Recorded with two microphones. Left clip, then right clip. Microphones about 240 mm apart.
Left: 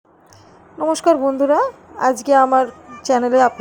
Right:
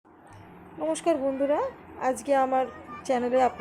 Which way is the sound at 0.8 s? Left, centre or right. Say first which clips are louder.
Left 11 dB; left.